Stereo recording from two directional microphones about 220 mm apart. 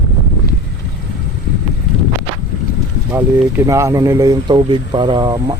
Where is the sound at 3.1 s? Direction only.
10° right (ahead or behind).